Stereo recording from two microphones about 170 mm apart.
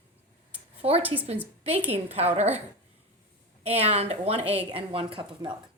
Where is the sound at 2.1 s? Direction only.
40° right (ahead or behind).